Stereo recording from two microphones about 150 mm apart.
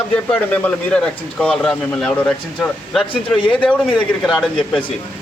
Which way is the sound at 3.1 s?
35° left (ahead or behind).